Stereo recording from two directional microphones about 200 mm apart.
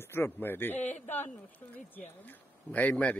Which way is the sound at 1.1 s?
10° left (ahead or behind).